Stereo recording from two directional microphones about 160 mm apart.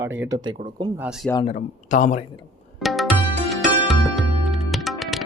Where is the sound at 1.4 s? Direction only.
50° left (ahead or behind).